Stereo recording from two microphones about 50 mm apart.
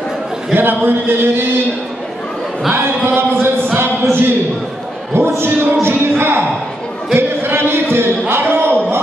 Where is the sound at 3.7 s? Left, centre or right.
Right.